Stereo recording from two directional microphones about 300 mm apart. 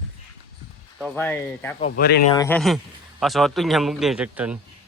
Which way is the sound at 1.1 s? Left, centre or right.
Centre.